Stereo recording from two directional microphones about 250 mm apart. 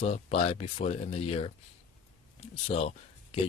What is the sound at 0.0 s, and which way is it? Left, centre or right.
Speech, left.